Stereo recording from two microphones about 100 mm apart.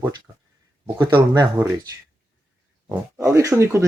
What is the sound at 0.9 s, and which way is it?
Speech, 45° right (ahead or behind).